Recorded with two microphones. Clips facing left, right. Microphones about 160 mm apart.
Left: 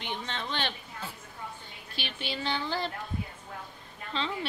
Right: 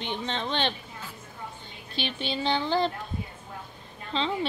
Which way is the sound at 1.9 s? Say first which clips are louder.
Right 6 dB; 25° right (ahead or behind).